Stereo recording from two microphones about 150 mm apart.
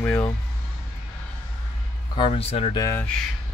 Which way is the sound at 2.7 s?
20° left (ahead or behind).